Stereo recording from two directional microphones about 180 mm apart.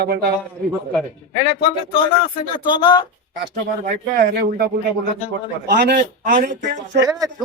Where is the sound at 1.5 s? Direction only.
30° left (ahead or behind).